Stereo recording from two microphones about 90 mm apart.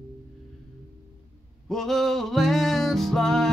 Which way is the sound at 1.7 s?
Centre (ahead or behind).